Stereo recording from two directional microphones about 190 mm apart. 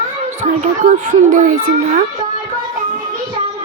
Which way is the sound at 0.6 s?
40° right (ahead or behind).